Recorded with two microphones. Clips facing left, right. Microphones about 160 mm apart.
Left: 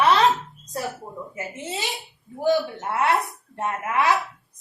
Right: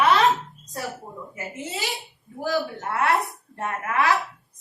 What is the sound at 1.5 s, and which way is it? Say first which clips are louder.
A woman's voice: right 1 dB; 20° left (ahead or behind).